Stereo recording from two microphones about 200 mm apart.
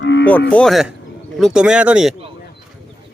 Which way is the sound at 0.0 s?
60° left (ahead or behind).